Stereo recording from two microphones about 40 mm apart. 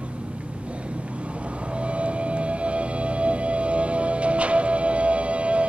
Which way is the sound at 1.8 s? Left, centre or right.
Right.